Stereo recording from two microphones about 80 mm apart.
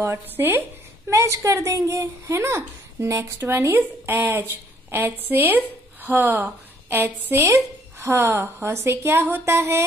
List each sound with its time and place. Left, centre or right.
0.0 s a woman's voice: right